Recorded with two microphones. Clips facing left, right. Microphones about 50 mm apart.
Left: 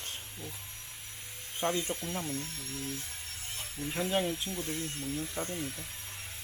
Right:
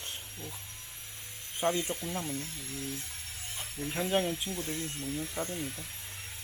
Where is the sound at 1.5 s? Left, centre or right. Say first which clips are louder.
Right 2 dB; centre.